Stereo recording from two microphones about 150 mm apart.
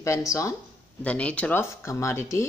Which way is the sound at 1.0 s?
10° left (ahead or behind).